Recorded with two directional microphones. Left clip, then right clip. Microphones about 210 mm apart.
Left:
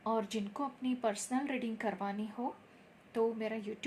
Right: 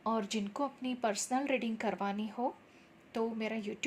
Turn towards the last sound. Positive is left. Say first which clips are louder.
# right 1 dB
turn(degrees=-35)  # may be behind; listen again after turning